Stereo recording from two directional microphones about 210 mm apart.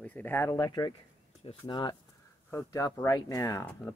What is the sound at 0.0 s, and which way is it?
Speech, 10° left (ahead or behind).